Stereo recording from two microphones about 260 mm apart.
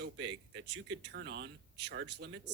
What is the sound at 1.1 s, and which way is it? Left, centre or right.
Speech, right.